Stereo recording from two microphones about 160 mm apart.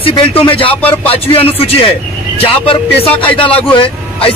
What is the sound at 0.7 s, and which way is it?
Speech, 10° left (ahead or behind).